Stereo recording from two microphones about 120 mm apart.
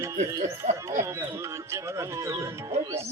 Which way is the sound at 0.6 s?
75° right (ahead or behind).